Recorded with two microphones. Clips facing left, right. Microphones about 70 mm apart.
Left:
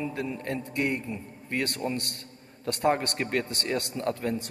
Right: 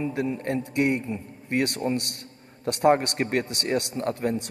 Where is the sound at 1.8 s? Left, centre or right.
Right.